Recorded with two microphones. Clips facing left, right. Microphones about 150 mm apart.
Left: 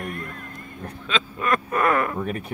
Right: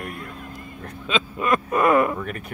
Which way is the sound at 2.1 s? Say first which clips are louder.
Left 3 dB; 25° left (ahead or behind).